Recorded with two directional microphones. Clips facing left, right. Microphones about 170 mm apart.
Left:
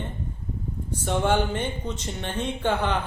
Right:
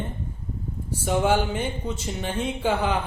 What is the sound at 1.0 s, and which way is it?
Speech, 10° right (ahead or behind).